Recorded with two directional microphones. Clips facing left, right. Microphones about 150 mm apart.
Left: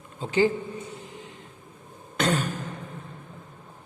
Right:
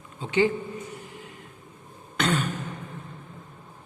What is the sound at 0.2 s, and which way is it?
Speech, 35° left (ahead or behind).